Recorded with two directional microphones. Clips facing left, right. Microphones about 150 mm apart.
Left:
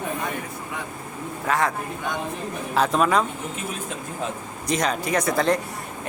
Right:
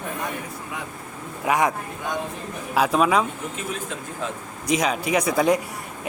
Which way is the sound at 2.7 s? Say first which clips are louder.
Right 1 dB; 5° right (ahead or behind).